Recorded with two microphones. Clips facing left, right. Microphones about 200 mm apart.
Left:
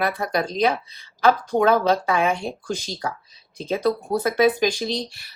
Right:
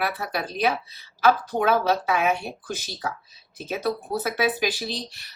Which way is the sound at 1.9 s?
5° right (ahead or behind).